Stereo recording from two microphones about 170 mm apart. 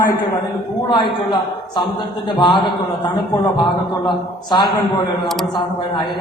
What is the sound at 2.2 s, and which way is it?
Speech, 25° left (ahead or behind).